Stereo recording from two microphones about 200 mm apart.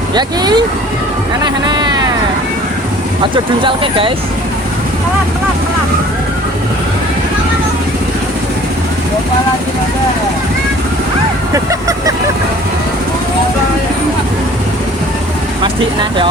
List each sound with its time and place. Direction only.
0.1 s speech: 20° right (ahead or behind)
3.3 s speech: 25° right (ahead or behind)
11.5 s speech: 15° right (ahead or behind)
15.6 s speech: 25° right (ahead or behind)